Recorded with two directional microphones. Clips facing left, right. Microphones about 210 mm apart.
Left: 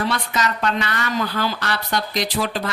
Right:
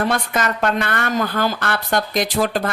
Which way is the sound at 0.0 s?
50° right (ahead or behind).